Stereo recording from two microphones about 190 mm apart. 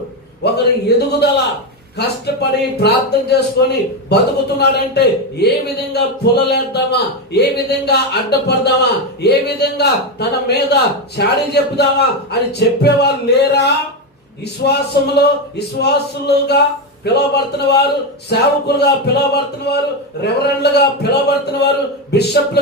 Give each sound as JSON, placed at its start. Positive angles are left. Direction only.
{"t": 0.4, "sound": "a man's voice", "side_deg": 60}
{"t": 14.6, "sound": "a man's voice", "side_deg": 60}